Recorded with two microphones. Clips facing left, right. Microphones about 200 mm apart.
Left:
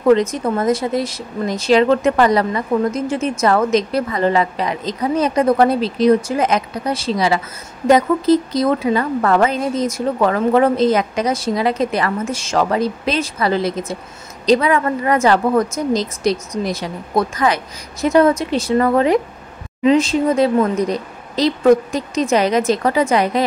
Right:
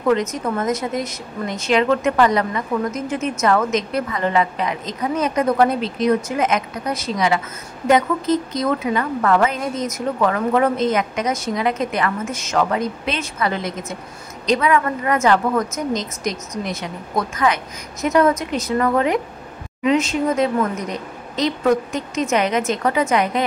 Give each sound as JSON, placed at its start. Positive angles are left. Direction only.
{"t": 0.1, "sound": "speech", "side_deg": 30}